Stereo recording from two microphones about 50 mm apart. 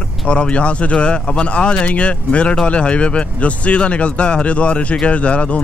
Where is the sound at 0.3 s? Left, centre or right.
Left.